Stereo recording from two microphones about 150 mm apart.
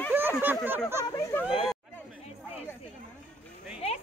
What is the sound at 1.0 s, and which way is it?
Speech, 20° left (ahead or behind).